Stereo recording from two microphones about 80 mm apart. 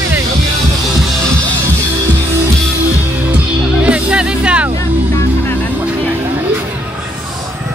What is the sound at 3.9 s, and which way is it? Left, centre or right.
Music, centre.